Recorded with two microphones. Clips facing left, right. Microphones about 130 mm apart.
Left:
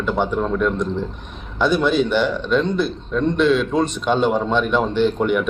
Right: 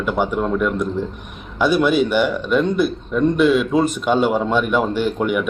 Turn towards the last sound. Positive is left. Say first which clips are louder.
# left 2 dB
turn(degrees=-5)  # may be behind; listen again after turning